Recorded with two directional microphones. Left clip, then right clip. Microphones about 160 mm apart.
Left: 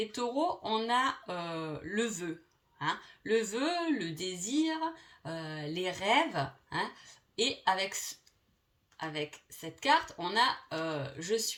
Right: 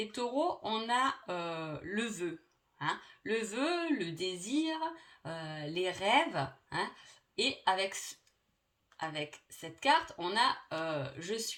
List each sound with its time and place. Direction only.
0.0 s speech: 35° right (ahead or behind)
9.1 s speech: 35° right (ahead or behind)